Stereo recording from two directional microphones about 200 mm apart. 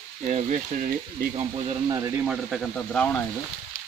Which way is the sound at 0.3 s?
35° right (ahead or behind).